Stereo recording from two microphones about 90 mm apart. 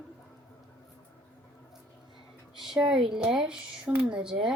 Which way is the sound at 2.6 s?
5° right (ahead or behind).